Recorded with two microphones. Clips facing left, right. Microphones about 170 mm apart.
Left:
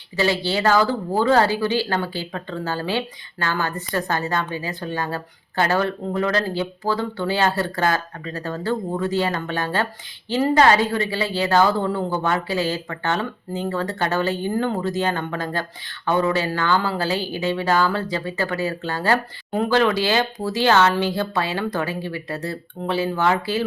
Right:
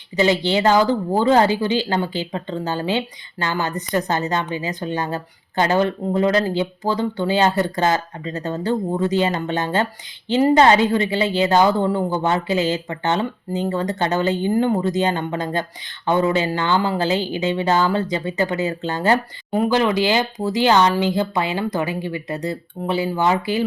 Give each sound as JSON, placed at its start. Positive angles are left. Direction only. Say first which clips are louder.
{"t": 0.2, "sound": "a woman's voice", "louder": "right 4 dB", "side_deg": -20}